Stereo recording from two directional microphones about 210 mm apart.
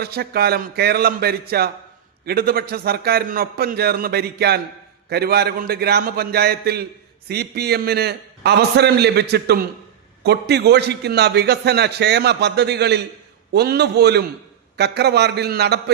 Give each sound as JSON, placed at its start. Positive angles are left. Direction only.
{"t": 0.0, "sound": "a man's voice", "side_deg": -50}